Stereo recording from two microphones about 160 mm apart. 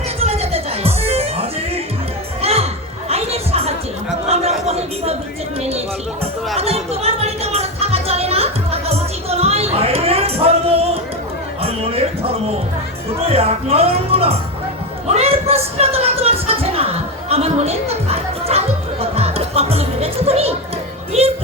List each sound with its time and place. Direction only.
0.2 s music: 40° right (ahead or behind)
3.1 s chatter: 40° right (ahead or behind)
4.3 s a sound: 40° right (ahead or behind)
6.6 s music: 40° right (ahead or behind)
15.0 s a sound: 40° right (ahead or behind)
21.1 s music: 40° right (ahead or behind)